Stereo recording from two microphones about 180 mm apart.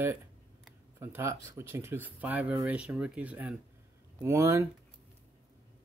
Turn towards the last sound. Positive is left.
turn(degrees=-15)  # may be behind; listen again after turning